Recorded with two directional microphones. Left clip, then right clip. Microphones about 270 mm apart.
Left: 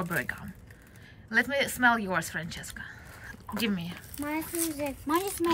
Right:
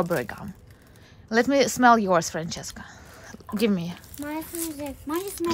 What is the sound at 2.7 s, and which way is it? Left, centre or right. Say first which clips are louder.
Whispering: even; centre.